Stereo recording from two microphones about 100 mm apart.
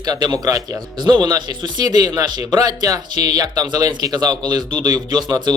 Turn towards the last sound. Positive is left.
turn(degrees=-45)  # may be behind; listen again after turning